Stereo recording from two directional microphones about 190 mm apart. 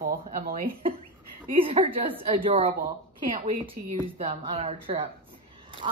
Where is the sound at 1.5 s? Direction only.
30° right (ahead or behind).